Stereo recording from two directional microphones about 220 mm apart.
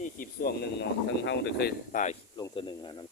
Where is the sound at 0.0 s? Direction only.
40° left (ahead or behind).